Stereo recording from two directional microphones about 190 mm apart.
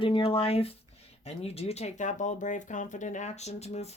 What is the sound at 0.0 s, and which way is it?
Speech, 30° left (ahead or behind).